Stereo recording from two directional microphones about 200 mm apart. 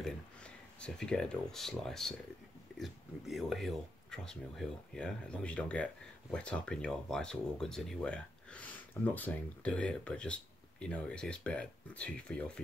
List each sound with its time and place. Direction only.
0.0 s speech: 5° left (ahead or behind)